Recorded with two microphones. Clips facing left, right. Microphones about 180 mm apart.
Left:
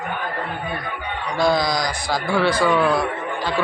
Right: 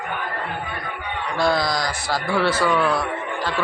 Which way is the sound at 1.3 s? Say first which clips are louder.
Left 2 dB; 5° right (ahead or behind).